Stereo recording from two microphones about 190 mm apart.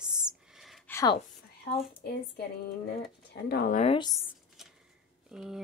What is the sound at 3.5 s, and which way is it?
Speech, 50° left (ahead or behind).